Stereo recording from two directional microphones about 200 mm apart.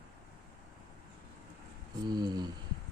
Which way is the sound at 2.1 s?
20° right (ahead or behind).